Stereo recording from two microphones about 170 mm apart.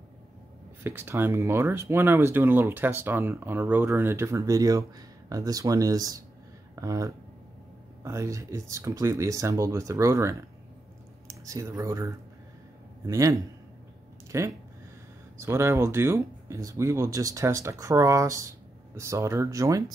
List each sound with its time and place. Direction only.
0.8 s a man's voice: 15° right (ahead or behind)